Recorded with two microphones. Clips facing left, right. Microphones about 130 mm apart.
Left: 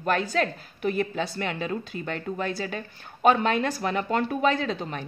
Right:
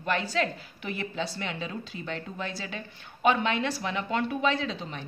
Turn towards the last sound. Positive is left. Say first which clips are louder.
# left 4 dB
turn(degrees=50)  # may be behind; listen again after turning